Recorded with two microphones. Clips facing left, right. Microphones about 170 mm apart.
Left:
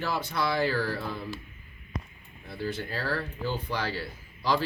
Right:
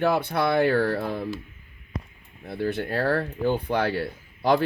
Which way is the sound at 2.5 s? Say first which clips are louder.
Right 6 dB; 60° right (ahead or behind).